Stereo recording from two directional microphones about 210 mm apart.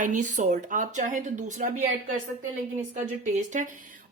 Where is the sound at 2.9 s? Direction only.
35° right (ahead or behind).